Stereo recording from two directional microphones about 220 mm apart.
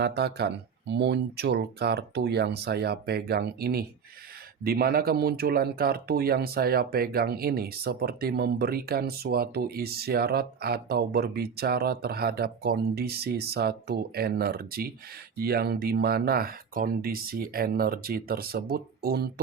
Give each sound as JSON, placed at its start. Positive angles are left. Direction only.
{"t": 0.0, "sound": "speech", "side_deg": -50}